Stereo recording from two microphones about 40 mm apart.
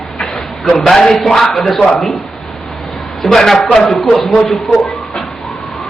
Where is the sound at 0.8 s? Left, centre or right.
Centre.